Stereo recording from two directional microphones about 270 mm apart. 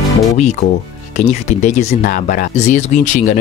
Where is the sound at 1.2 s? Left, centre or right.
Left.